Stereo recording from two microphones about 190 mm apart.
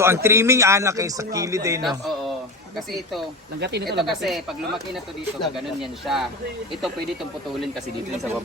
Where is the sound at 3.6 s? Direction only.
60° right (ahead or behind).